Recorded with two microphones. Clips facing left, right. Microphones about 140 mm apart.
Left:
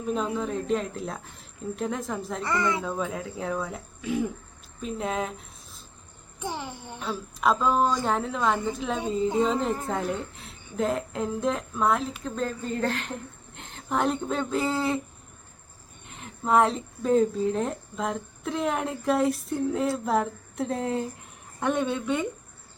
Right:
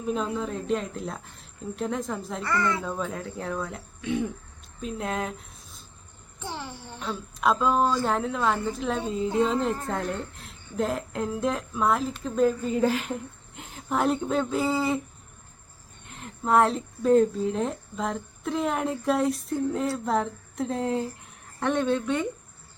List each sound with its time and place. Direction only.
0.0 s speech: centre (ahead or behind)
2.4 s a woman's voice: 20° left (ahead or behind)
2.8 s speech: centre (ahead or behind)
6.4 s a child's voice: 15° left (ahead or behind)
7.0 s speech: centre (ahead or behind)
16.0 s speech: centre (ahead or behind)